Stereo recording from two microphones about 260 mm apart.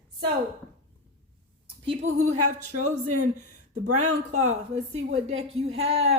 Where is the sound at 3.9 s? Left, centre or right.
Right.